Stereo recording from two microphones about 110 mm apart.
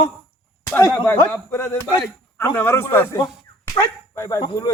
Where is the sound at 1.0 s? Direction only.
15° left (ahead or behind).